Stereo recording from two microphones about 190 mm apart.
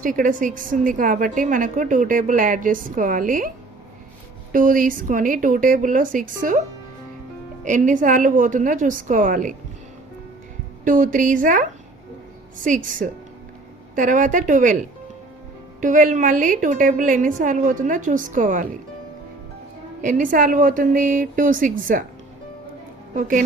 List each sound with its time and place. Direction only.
0.0 s a woman's voice: 45° right (ahead or behind)
4.5 s a woman's voice: 45° right (ahead or behind)
7.6 s a woman's voice: 40° right (ahead or behind)
10.8 s a woman's voice: 45° right (ahead or behind)
12.6 s a woman's voice: 45° right (ahead or behind)
15.8 s a woman's voice: 45° right (ahead or behind)
20.0 s a woman's voice: 45° right (ahead or behind)